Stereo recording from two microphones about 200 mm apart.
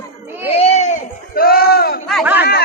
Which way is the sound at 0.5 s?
30° left (ahead or behind).